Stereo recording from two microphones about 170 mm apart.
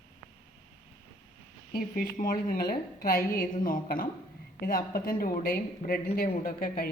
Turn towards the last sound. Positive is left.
turn(degrees=65)  # may be behind; listen again after turning